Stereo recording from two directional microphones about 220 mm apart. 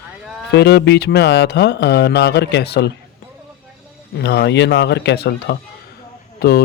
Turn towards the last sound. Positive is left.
turn(degrees=45)  # may be behind; listen again after turning